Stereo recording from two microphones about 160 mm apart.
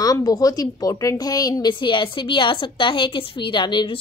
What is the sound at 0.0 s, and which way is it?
A woman's voice, 25° left (ahead or behind).